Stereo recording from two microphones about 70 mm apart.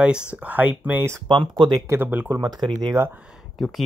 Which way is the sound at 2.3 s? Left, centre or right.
Right.